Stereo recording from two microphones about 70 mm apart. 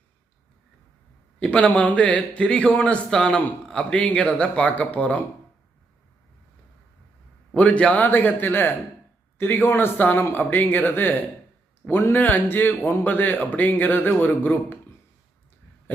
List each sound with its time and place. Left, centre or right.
1.4 s a man's voice: centre
7.5 s speech: centre
12.1 s speech: left